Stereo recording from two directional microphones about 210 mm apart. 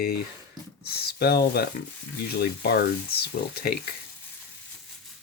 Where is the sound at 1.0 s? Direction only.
45° left (ahead or behind).